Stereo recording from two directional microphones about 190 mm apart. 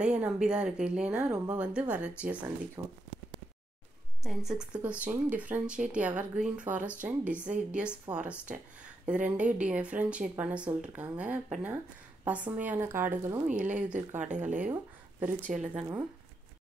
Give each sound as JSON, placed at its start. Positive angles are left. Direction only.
{"t": 0.0, "sound": "a woman's voice", "side_deg": -5}
{"t": 2.8, "sound": "speech", "side_deg": -20}
{"t": 4.2, "sound": "a woman's voice", "side_deg": 0}
{"t": 13.9, "sound": "speech", "side_deg": -40}
{"t": 14.5, "sound": "speech", "side_deg": -10}